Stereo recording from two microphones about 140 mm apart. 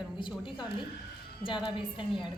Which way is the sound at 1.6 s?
35° left (ahead or behind).